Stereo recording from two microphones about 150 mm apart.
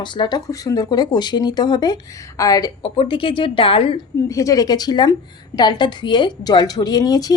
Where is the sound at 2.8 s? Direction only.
35° left (ahead or behind).